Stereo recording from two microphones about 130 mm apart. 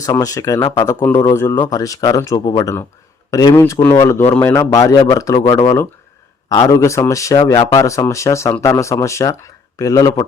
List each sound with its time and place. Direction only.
0.0 s speech: 25° left (ahead or behind)